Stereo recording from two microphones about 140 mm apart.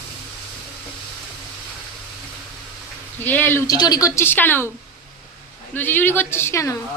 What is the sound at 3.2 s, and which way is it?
A woman's voice, 15° left (ahead or behind).